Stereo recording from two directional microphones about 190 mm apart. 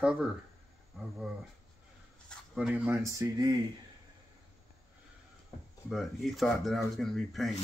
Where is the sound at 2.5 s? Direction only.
5° right (ahead or behind).